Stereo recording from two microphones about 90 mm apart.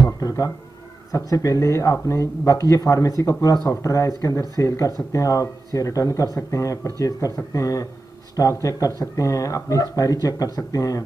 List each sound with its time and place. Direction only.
0.0 s music: 40° left (ahead or behind)
1.1 s speech: 40° left (ahead or behind)